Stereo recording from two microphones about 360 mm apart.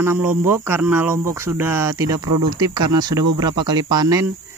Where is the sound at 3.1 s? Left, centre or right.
Right.